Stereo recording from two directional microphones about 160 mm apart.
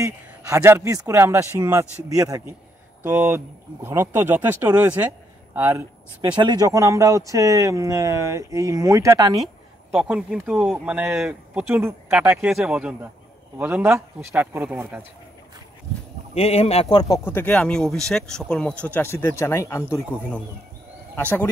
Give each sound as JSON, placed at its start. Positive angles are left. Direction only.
{"t": 0.0, "sound": "speech", "side_deg": -15}
{"t": 6.3, "sound": "speech", "side_deg": -25}
{"t": 9.8, "sound": "speech", "side_deg": -5}
{"t": 16.3, "sound": "speech", "side_deg": 40}
{"t": 17.1, "sound": "speech", "side_deg": 15}
{"t": 21.2, "sound": "speech", "side_deg": 10}